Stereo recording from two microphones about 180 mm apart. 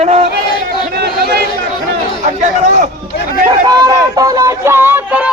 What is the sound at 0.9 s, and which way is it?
Speech, 60° right (ahead or behind).